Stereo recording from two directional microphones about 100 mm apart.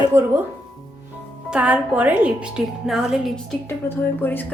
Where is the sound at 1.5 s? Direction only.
10° right (ahead or behind).